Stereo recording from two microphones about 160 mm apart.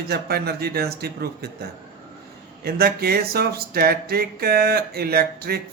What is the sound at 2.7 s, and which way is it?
Speech, 75° right (ahead or behind).